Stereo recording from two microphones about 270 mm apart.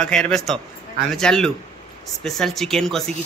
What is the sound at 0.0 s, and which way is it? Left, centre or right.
A man's voice, centre.